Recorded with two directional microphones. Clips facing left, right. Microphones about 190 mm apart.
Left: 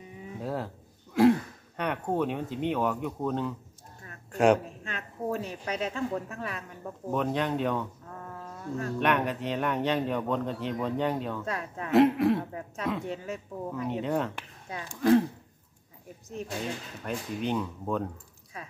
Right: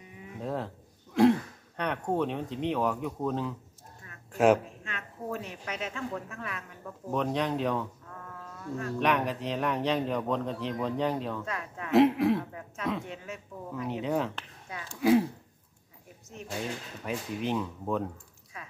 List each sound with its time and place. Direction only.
0.4 s a sound: centre (ahead or behind)
1.8 s a man's voice: 5° left (ahead or behind)
4.3 s a sound: centre (ahead or behind)
4.8 s speech: 35° left (ahead or behind)
7.1 s a man's voice: centre (ahead or behind)
8.1 s a sound: 30° left (ahead or behind)
9.0 s a man's voice: centre (ahead or behind)
11.4 s a man's voice: 35° left (ahead or behind)
11.9 s a man's voice: centre (ahead or behind)
12.4 s a man's voice: 35° left (ahead or behind)
13.7 s a man's voice: centre (ahead or behind)
16.4 s a man's voice: 35° left (ahead or behind)
17.0 s a man's voice: centre (ahead or behind)
18.1 s typing: 35° left (ahead or behind)